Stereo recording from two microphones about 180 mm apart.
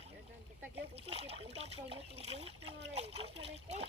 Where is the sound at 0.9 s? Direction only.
35° right (ahead or behind).